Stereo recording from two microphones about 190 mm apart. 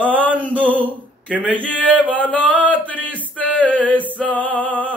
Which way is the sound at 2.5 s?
10° left (ahead or behind).